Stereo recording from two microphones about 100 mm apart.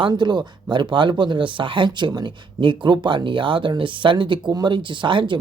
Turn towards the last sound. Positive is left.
turn(degrees=-55)  # may be behind; listen again after turning